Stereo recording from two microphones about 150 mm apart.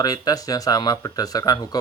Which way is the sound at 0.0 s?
25° left (ahead or behind).